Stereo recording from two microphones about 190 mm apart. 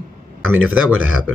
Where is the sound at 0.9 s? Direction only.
90° right.